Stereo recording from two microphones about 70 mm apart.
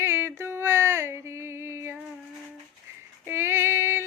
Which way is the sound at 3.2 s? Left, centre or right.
Right.